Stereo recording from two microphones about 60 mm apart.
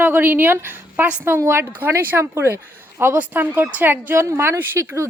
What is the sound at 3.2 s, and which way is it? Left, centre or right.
Speech, right.